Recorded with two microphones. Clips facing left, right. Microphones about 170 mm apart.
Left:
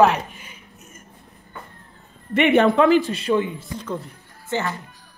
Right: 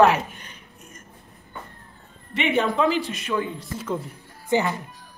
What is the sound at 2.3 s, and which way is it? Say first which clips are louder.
Speech: left 7 dB; 65° left (ahead or behind).